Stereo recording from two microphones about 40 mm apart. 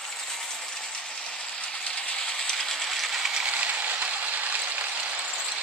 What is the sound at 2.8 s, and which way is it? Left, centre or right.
Train, centre.